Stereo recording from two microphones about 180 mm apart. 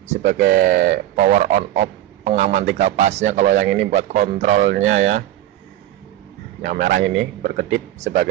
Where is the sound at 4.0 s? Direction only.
40° right (ahead or behind).